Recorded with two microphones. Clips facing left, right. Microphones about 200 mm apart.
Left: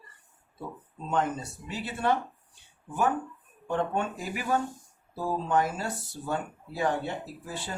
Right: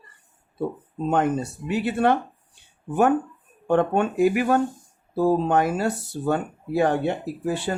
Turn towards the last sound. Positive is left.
turn(degrees=-70)  # may be behind; listen again after turning